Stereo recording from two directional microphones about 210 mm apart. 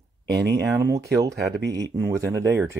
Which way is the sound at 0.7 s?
15° right (ahead or behind).